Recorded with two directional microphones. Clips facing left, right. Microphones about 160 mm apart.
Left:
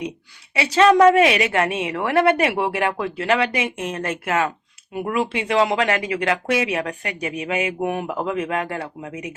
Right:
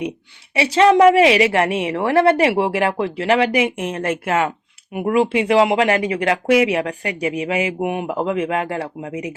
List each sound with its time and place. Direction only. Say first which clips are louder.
0.5 s a woman's voice: right 2 dB; 30° right (ahead or behind)